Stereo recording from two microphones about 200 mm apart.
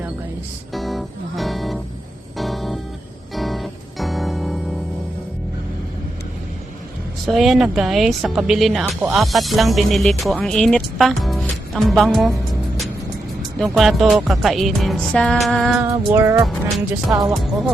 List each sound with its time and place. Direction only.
0.7 s music: centre (ahead or behind)
7.3 s speech: centre (ahead or behind)
13.6 s speech: centre (ahead or behind)
16.1 s music: 15° right (ahead or behind)
17.3 s speech: centre (ahead or behind)